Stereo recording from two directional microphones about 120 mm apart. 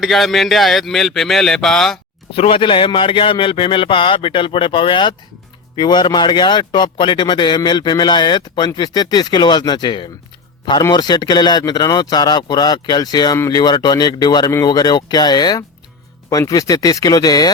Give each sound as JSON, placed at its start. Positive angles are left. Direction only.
{"t": 0.0, "sound": "speech", "side_deg": 0}
{"t": 2.3, "sound": "a man's voice", "side_deg": 55}